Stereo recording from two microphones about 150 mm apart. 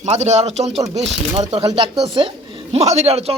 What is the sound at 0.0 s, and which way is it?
Speech, 50° right (ahead or behind).